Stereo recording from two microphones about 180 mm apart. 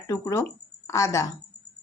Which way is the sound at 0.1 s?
20° left (ahead or behind).